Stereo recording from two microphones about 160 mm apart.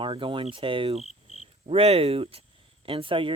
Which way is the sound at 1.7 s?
40° right (ahead or behind).